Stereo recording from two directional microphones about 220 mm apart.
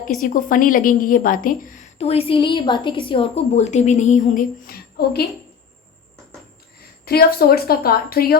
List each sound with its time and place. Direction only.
0.2 s a woman's voice: 35° left (ahead or behind)
7.0 s a woman's voice: 45° left (ahead or behind)